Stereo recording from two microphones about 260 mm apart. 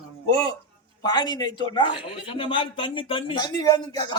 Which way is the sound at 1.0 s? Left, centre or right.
Centre.